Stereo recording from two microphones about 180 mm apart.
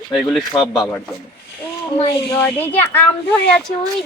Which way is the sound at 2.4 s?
10° left (ahead or behind).